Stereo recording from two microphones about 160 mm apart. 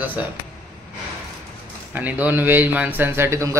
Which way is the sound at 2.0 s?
10° right (ahead or behind).